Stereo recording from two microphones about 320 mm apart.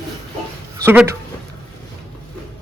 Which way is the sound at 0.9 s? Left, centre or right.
Centre.